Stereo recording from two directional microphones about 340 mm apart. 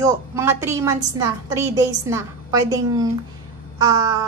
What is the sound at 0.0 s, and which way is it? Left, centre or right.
A woman's voice, centre.